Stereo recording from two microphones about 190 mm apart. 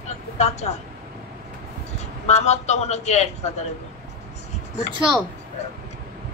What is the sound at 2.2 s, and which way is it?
A man's voice, 35° left (ahead or behind).